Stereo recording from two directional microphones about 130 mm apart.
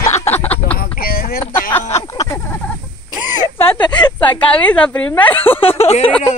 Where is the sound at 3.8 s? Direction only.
35° left (ahead or behind).